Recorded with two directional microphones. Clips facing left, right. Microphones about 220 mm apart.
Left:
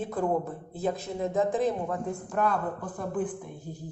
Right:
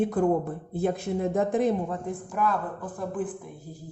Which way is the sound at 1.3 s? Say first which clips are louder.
Right 1 dB; 55° right (ahead or behind).